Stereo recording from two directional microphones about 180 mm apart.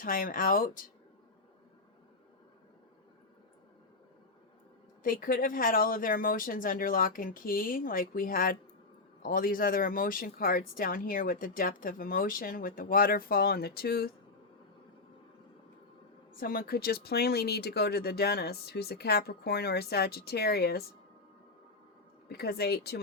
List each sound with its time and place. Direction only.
0.0 s speech: 50° left (ahead or behind)
5.0 s speech: 50° left (ahead or behind)
16.3 s speech: 50° left (ahead or behind)
22.3 s speech: 65° left (ahead or behind)